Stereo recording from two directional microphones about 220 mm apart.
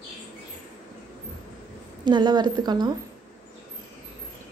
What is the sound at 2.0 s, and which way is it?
Speech, 20° right (ahead or behind).